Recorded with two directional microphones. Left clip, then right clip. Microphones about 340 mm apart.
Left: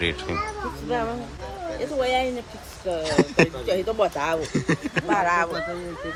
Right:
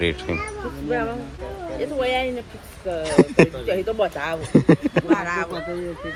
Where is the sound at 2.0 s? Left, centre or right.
Centre.